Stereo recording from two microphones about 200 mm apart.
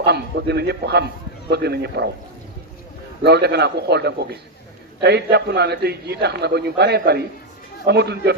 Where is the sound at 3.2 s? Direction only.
55° right (ahead or behind).